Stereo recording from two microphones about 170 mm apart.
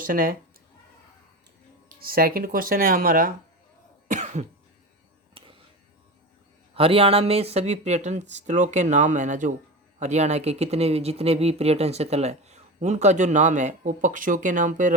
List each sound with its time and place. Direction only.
0.1 s speech: 55° right (ahead or behind)
2.0 s speech: 60° right (ahead or behind)
4.1 s cough: 45° right (ahead or behind)
6.7 s speech: 35° right (ahead or behind)